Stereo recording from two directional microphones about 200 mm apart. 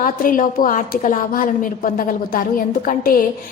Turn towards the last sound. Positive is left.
turn(degrees=45)  # may be behind; listen again after turning